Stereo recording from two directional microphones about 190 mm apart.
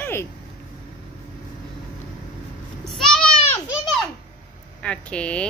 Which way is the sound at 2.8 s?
5° left (ahead or behind).